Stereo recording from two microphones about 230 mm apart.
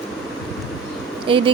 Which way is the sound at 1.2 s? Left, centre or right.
Right.